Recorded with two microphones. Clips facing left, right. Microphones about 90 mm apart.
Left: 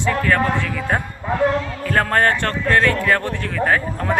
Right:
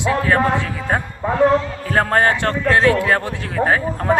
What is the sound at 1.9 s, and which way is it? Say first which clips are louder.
A man's voice: right 1 dB; 20° right (ahead or behind).